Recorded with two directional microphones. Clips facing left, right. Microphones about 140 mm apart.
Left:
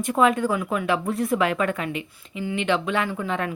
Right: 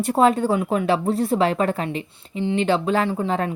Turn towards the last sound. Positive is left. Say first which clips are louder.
# right 4 dB
turn(degrees=-35)  # may be behind; listen again after turning